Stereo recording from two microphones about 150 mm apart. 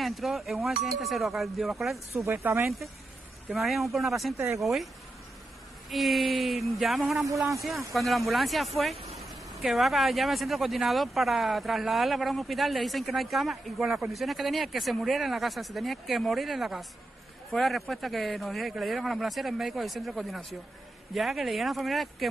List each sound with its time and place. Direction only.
0.0 s speech: centre (ahead or behind)
2.1 s speech: 20° right (ahead or behind)
3.4 s speech: centre (ahead or behind)
5.9 s speech: centre (ahead or behind)